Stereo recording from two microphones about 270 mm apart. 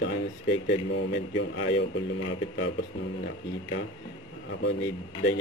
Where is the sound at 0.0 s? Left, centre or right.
Left.